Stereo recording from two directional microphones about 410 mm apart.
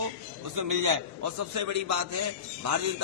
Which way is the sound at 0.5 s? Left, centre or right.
Right.